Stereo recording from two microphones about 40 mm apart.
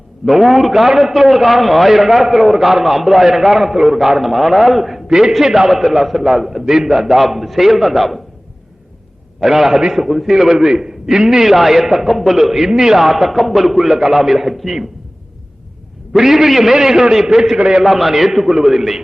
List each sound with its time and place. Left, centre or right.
0.3 s a man's voice: centre
5.0 s a man's voice: centre
9.4 s a man's voice: centre
16.1 s a man's voice: centre
17.8 s a man's voice: centre